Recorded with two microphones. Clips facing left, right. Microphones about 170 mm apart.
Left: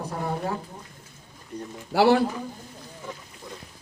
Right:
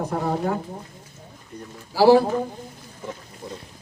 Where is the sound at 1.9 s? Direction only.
65° left (ahead or behind).